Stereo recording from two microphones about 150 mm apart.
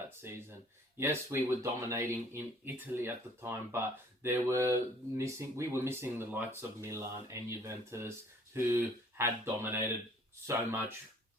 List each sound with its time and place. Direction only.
0.2 s speech: 15° right (ahead or behind)